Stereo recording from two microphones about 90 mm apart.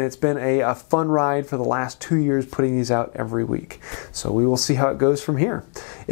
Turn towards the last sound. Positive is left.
turn(degrees=15)  # may be behind; listen again after turning